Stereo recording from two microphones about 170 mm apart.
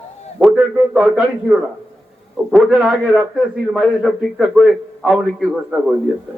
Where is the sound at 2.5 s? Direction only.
5° right (ahead or behind).